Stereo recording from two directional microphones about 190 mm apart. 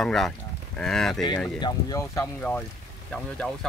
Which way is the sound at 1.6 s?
20° left (ahead or behind).